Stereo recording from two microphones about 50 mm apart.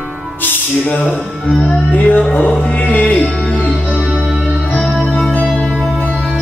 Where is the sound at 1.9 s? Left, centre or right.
Left.